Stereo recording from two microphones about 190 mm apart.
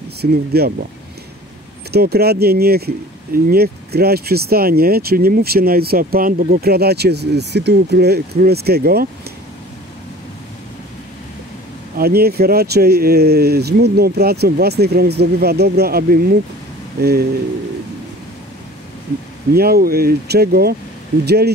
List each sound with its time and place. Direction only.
0.2 s speech: 55° right (ahead or behind)
1.9 s speech: 55° right (ahead or behind)
12.0 s speech: 55° right (ahead or behind)
19.5 s speech: 55° right (ahead or behind)